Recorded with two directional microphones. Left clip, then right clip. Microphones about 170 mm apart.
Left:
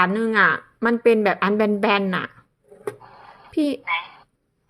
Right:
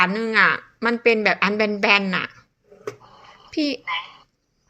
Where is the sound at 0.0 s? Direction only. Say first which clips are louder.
Even; 25° left (ahead or behind).